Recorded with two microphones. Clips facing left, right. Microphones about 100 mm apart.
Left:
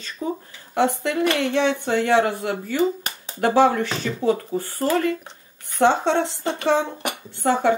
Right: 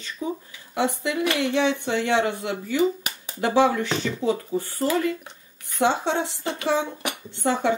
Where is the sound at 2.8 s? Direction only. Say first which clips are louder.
Left 1 dB; 25° left (ahead or behind).